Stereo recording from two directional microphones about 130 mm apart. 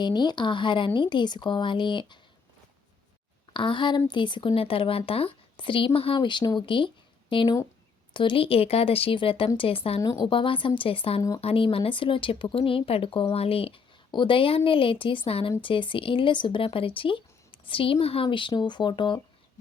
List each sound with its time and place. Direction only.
0.0 s speech: 35° left (ahead or behind)
3.5 s speech: 40° left (ahead or behind)
10.0 s a woman's voice: 25° left (ahead or behind)
10.2 s speech: 40° left (ahead or behind)